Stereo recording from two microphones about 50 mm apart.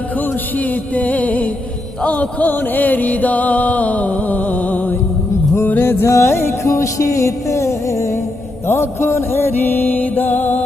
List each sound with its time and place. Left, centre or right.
0.6 s music: left
5.6 s music: left
6.1 s music: left
8.6 s a sound: left
9.6 s music: left